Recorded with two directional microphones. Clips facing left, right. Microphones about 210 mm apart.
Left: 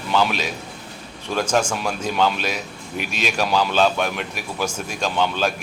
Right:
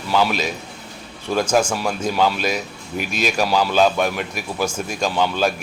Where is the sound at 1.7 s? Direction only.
5° right (ahead or behind).